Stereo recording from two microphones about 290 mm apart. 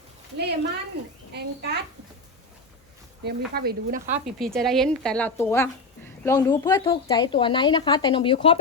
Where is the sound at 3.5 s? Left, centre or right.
Right.